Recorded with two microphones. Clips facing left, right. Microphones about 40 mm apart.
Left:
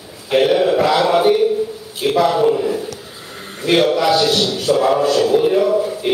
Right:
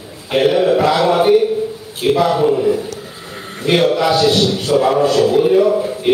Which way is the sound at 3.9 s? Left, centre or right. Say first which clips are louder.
Even; centre.